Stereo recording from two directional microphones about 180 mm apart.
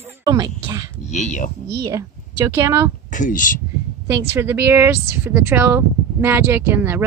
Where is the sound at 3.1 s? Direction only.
45° left (ahead or behind).